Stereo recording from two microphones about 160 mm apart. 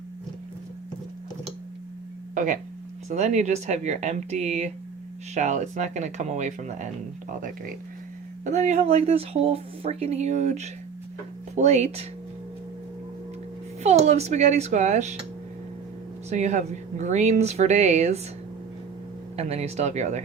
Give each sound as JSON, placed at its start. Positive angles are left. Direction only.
{"t": 2.3, "sound": "speech", "side_deg": -50}
{"t": 8.4, "sound": "speech", "side_deg": -45}
{"t": 13.8, "sound": "speech", "side_deg": -45}
{"t": 16.3, "sound": "speech", "side_deg": -45}
{"t": 19.4, "sound": "speech", "side_deg": -40}